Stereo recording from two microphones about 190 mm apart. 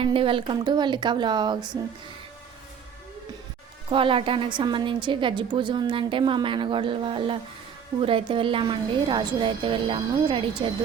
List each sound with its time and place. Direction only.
0.0 s a woman's voice: 30° right (ahead or behind)
3.8 s a woman's voice: 25° right (ahead or behind)